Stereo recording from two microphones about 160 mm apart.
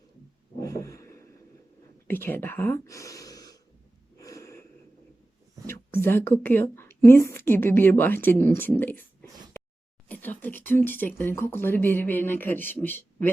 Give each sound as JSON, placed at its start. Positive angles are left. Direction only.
{"t": 0.6, "sound": "a sound", "side_deg": 20}
{"t": 2.0, "sound": "speech", "side_deg": 15}
{"t": 4.2, "sound": "gasp", "side_deg": 20}
{"t": 5.6, "sound": "speech", "side_deg": 15}
{"t": 10.1, "sound": "speech", "side_deg": 10}